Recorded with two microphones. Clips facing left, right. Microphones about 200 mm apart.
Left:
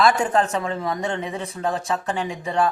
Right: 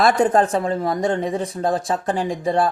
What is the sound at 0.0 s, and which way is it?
Speech, 45° right (ahead or behind).